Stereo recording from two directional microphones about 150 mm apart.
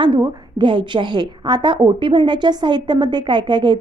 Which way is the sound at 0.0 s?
30° right (ahead or behind).